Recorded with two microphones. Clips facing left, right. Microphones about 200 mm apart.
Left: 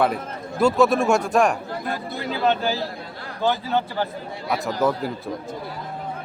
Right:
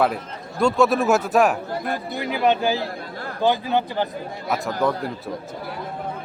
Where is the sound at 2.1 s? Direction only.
15° right (ahead or behind).